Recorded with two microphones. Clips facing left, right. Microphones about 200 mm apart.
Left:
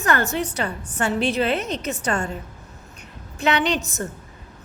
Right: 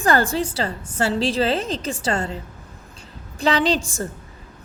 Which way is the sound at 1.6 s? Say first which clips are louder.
Right 1 dB; 90° right.